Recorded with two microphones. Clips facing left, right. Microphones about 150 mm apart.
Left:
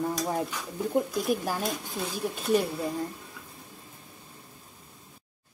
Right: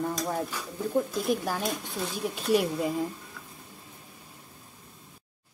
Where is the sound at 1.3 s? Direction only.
5° left (ahead or behind).